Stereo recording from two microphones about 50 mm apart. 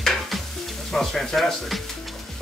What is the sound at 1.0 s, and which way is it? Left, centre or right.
Speech, centre.